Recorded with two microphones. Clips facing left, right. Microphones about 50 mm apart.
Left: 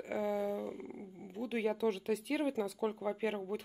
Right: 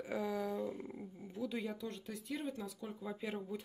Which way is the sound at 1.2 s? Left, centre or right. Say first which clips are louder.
Left 3 dB; left.